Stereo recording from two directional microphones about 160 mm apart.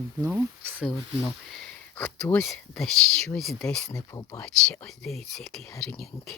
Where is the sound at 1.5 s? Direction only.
5° left (ahead or behind).